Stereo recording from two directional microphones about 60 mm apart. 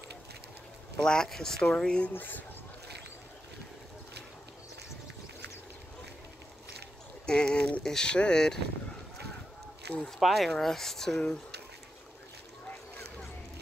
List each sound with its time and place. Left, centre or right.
0.9 s speech: centre
2.1 s speech: left
7.2 s speech: centre
9.9 s speech: centre
10.2 s speech: centre